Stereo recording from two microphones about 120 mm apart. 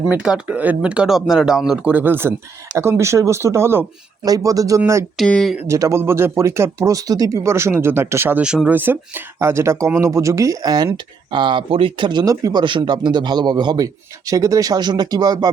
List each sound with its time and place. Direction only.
0.1 s speech: 10° right (ahead or behind); by 4.8 s 30° right (ahead or behind)
5.1 s speech: 5° left (ahead or behind)
5.6 s speech: 25° right (ahead or behind)